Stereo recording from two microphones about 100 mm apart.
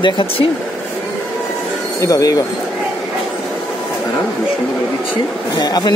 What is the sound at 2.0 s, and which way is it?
Speech, 35° left (ahead or behind).